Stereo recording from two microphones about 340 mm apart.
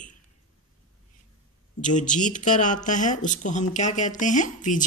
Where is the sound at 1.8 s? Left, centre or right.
Left.